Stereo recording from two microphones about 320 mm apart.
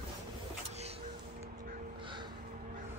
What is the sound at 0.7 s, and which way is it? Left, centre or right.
Music, centre.